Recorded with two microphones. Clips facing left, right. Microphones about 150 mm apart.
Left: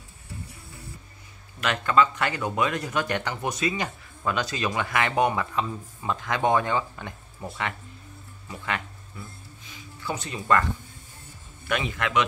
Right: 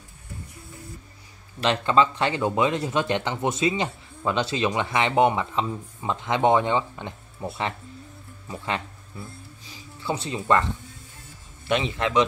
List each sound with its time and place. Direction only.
1.6 s speech: 30° right (ahead or behind)
9.7 s a sound: 30° right (ahead or behind)
11.6 s speech: 25° right (ahead or behind)